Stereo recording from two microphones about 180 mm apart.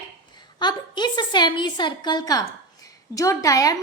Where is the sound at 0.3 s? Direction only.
25° left (ahead or behind).